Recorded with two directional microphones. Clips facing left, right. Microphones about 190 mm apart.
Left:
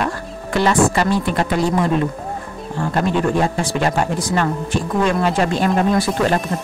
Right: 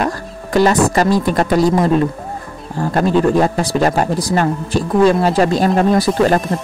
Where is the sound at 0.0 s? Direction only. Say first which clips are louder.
Right 3 dB; 40° right (ahead or behind).